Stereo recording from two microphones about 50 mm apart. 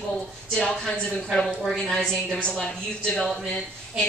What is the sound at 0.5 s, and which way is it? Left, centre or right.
A woman's voice, centre.